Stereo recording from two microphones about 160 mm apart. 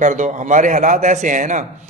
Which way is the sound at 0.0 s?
50° right (ahead or behind).